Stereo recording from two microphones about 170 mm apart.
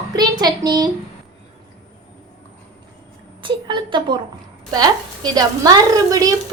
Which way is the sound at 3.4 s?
25° right (ahead or behind).